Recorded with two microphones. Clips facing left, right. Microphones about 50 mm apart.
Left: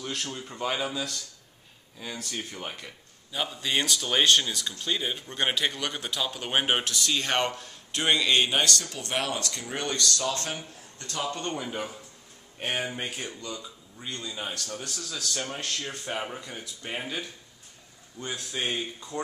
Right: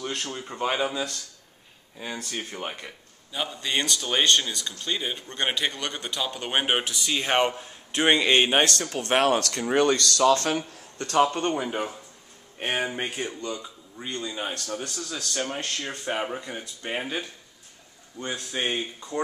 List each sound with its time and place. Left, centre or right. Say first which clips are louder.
0.0 s speech: right 2 dB; centre
3.3 s speech: right 1 dB; centre; by 9.7 s right
9.7 s a man's voice: right 9 dB; right
11.0 s a man's voice: right 13 dB; right
11.2 s speech: right 6 dB; right